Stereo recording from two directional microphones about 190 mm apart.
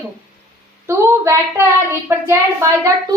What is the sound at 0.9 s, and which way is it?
A woman's voice, 15° right (ahead or behind).